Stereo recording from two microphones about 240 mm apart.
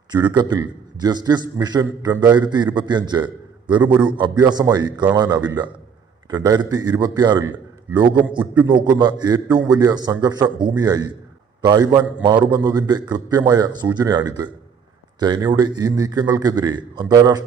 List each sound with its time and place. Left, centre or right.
0.1 s a man's voice: centre
3.8 s a man's voice: centre
4.2 s a man's voice: centre
8.6 s a man's voice: centre